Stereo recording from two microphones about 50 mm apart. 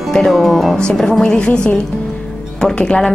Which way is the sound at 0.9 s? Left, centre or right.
Centre.